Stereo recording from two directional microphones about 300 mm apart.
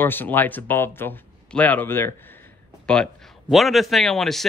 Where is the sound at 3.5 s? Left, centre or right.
Centre.